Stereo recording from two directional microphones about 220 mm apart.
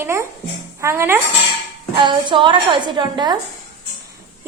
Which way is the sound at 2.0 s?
20° right (ahead or behind).